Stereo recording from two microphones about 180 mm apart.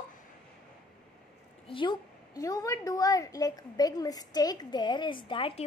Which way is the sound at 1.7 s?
25° left (ahead or behind).